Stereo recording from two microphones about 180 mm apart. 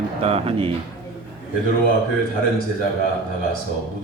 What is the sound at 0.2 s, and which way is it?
Speech, 35° right (ahead or behind).